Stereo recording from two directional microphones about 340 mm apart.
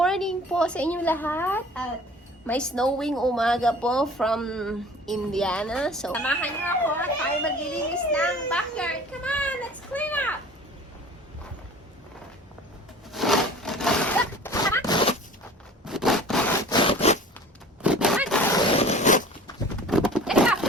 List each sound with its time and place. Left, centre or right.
0.0 s a woman's voice: centre
13.1 s a sound: centre
15.8 s rub: centre
16.8 s zipper: centre
17.8 s a sound: centre
18.8 s zipper: centre
19.9 s zipper: centre